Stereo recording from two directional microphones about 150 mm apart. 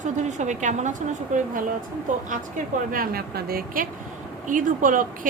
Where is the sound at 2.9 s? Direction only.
80° right.